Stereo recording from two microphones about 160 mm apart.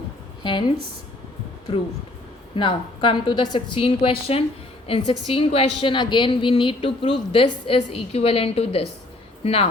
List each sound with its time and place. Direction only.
2.6 s a woman's voice: 30° left (ahead or behind)